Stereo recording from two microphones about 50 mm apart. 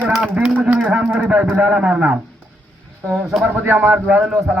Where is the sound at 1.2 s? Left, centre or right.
Right.